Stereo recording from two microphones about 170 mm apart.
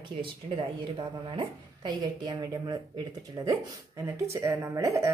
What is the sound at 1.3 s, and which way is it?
A woman's voice, 25° right (ahead or behind).